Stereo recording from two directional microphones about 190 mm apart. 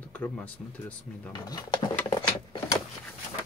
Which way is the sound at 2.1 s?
20° left (ahead or behind).